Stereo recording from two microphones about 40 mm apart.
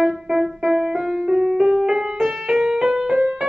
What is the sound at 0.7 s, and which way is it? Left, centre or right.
Music, centre.